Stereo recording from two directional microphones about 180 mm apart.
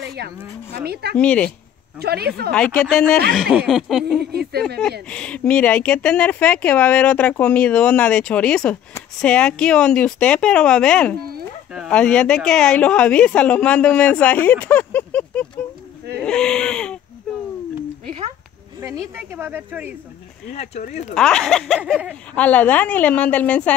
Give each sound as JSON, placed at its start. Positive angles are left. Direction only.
{"t": 0.0, "sound": "a sound", "side_deg": -65}
{"t": 1.1, "sound": "a woman's voice", "side_deg": 5}
{"t": 2.0, "sound": "speech", "side_deg": -60}
{"t": 2.5, "sound": "speech", "side_deg": 5}
{"t": 4.2, "sound": "speech", "side_deg": -60}
{"t": 5.0, "sound": "speech", "side_deg": 5}
{"t": 18.8, "sound": "speech", "side_deg": -15}
{"t": 21.1, "sound": "speech", "side_deg": 5}
{"t": 22.3, "sound": "a woman's voice", "side_deg": 5}